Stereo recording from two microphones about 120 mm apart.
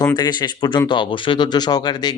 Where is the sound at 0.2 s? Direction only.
40° left (ahead or behind).